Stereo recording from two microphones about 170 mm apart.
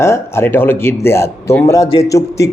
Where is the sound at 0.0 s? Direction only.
15° left (ahead or behind).